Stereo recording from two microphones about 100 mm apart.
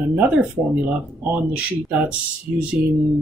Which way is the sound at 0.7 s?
15° right (ahead or behind).